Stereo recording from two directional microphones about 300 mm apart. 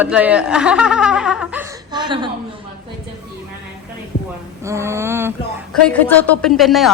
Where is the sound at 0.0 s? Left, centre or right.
Centre.